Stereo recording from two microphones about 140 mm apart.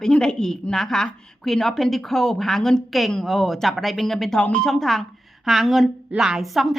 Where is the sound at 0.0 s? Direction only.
5° left (ahead or behind).